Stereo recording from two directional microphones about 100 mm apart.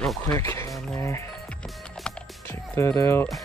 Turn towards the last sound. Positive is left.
turn(degrees=25)  # may be behind; listen again after turning